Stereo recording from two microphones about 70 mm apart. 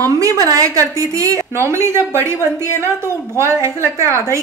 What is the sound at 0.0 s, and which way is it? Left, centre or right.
A woman's voice, right.